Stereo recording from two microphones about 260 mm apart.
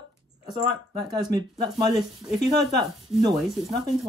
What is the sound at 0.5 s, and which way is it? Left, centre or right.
Speech, centre.